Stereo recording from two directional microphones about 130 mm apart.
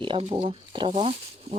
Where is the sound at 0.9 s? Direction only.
55° right (ahead or behind).